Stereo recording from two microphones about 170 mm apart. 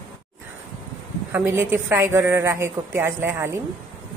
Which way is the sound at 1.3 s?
15° right (ahead or behind).